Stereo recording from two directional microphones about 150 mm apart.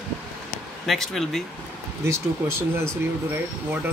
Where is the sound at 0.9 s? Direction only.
Centre (ahead or behind).